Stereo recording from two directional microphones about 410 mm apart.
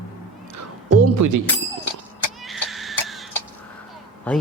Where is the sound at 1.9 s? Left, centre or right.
Left.